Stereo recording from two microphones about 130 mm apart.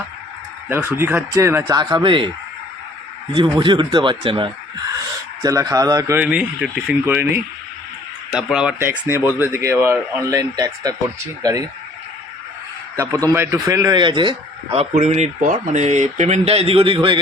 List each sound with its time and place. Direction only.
0.7 s speech: 20° right (ahead or behind)
1.8 s a man's voice: 35° right (ahead or behind)
3.3 s a man's voice: 35° right (ahead or behind)
4.9 s speech: 25° right (ahead or behind)
6.1 s speech: 10° right (ahead or behind)
8.3 s speech: 5° right (ahead or behind)
8.8 s speech: 15° right (ahead or behind)
13.0 s speech: 25° right (ahead or behind)
14.7 s speech: 55° right (ahead or behind)